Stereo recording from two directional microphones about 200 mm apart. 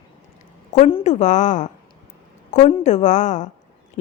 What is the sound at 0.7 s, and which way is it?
Speech, 30° left (ahead or behind).